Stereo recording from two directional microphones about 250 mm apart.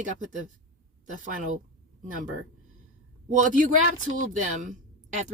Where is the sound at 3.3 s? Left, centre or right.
Right.